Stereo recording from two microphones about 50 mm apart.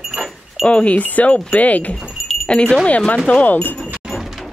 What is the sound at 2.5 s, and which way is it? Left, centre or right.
Speech, centre.